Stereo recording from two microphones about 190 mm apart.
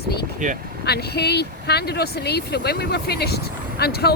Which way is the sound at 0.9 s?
55° left (ahead or behind).